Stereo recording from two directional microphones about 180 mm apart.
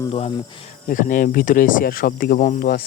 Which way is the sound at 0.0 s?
30° left (ahead or behind).